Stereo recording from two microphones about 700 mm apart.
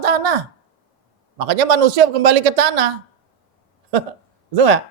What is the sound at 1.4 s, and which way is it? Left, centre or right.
Speech, right.